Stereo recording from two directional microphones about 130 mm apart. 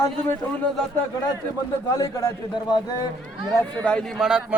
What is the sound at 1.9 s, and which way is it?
Speech, 25° left (ahead or behind).